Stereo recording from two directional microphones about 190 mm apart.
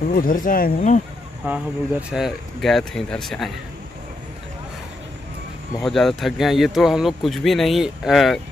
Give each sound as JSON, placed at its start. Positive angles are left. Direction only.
{"t": 0.1, "sound": "speech", "side_deg": 45}
{"t": 1.4, "sound": "speech", "side_deg": -5}
{"t": 5.8, "sound": "speech", "side_deg": 0}